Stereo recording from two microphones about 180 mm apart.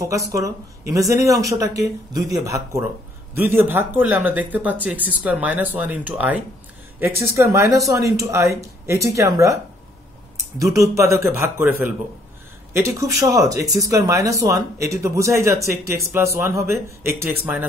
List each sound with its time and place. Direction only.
0.0 s speech: 20° right (ahead or behind)
10.6 s speech: 15° right (ahead or behind)